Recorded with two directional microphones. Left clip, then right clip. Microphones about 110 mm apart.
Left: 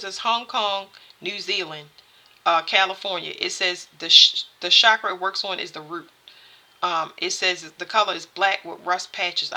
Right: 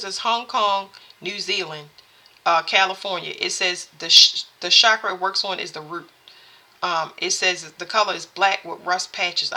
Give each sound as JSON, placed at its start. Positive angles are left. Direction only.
{"t": 0.0, "sound": "speech", "side_deg": 25}